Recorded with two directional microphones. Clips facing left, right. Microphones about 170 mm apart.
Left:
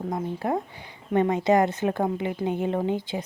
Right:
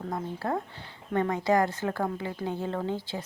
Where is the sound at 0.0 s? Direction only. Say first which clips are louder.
Left 4 dB; 15° left (ahead or behind).